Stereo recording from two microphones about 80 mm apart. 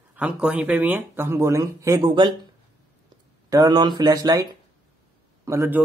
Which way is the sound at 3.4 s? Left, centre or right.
Right.